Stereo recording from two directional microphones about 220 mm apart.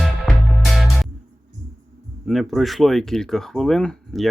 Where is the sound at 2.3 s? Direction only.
Centre (ahead or behind).